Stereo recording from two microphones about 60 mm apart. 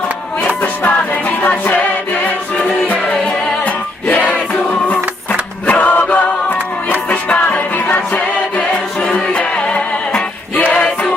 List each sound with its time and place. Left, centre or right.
0.6 s music: left
2.8 s music: left
5.6 s choir: left
7.1 s music: left